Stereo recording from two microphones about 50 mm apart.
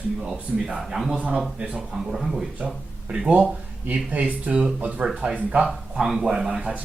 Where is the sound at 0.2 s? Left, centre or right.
Centre.